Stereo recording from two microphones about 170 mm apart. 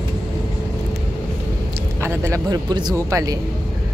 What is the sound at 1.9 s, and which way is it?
Speech, 15° right (ahead or behind).